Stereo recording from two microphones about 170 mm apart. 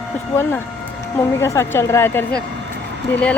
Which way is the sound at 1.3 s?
15° left (ahead or behind).